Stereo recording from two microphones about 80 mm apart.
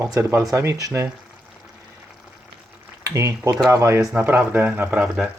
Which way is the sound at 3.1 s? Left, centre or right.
Right.